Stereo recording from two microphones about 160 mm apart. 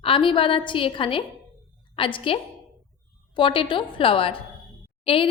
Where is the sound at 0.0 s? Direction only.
35° left (ahead or behind).